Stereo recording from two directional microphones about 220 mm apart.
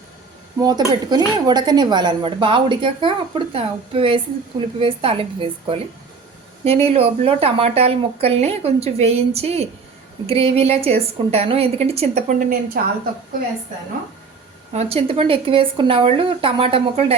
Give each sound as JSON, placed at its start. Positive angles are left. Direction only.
{"t": 0.6, "sound": "a woman's voice", "side_deg": -20}
{"t": 14.7, "sound": "a woman's voice", "side_deg": -30}